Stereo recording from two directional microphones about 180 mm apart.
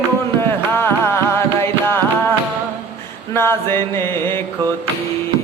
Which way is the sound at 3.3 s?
15° left (ahead or behind).